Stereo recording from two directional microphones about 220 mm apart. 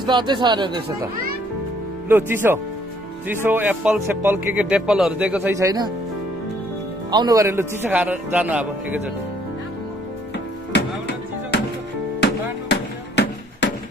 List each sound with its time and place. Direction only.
0.0 s speech: 20° right (ahead or behind)
2.0 s speech: 10° right (ahead or behind)
7.1 s speech: 20° right (ahead or behind)
10.7 s music: 50° left (ahead or behind)